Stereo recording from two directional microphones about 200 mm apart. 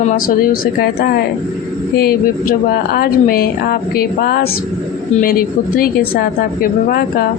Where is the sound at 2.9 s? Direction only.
50° left (ahead or behind).